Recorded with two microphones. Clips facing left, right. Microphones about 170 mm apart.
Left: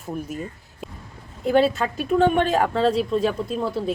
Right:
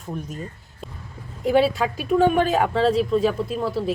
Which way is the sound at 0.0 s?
10° left (ahead or behind).